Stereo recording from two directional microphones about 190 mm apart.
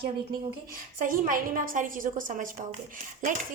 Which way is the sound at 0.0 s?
25° right (ahead or behind).